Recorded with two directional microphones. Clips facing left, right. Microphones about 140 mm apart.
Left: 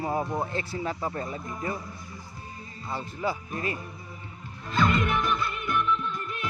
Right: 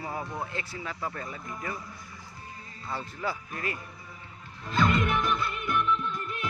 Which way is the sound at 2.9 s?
15° left (ahead or behind).